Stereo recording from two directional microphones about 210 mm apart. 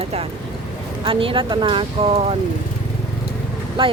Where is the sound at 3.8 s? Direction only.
25° right (ahead or behind).